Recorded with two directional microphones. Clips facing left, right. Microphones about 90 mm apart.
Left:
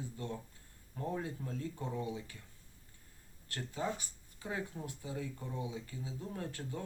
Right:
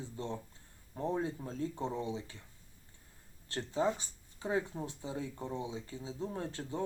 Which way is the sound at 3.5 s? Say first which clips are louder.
Right 6 dB; 25° right (ahead or behind).